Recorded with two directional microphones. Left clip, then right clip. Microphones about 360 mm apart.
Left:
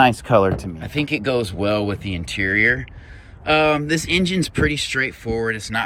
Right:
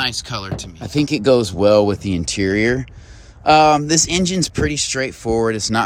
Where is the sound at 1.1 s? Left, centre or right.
Right.